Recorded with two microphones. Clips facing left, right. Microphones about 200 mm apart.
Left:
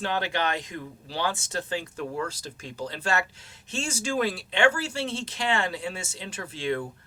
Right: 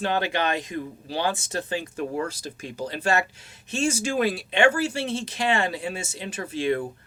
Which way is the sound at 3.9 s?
10° right (ahead or behind).